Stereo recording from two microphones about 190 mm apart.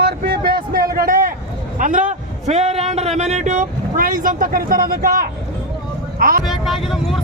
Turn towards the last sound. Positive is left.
turn(degrees=0)  # may be behind; listen again after turning